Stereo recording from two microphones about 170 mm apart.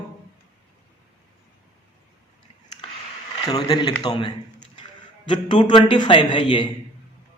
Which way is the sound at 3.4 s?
20° left (ahead or behind).